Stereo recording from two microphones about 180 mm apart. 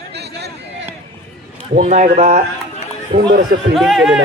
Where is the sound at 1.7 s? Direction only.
40° right (ahead or behind).